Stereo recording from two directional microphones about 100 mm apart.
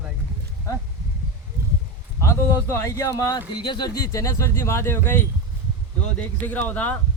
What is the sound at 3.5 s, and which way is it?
Speech, 50° left (ahead or behind).